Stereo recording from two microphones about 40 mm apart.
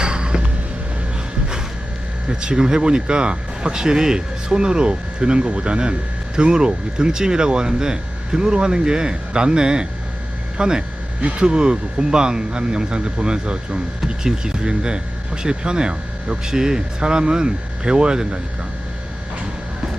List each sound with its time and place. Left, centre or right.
0.0 s a sound: right
2.3 s speech: right
11.2 s speech: right